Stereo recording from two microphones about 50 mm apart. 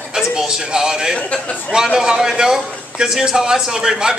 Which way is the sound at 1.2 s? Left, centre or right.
Left.